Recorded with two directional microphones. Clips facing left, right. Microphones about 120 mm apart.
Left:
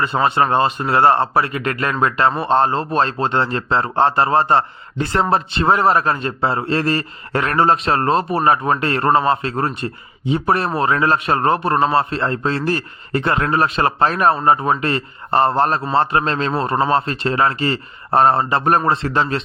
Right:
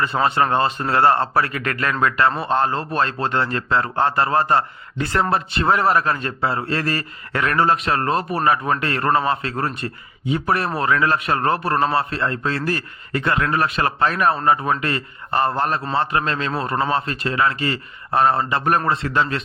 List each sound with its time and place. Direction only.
0.0 s a man's voice: 20° left (ahead or behind)